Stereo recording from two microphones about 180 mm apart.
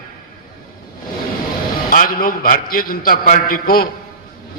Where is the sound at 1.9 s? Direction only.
50° left (ahead or behind).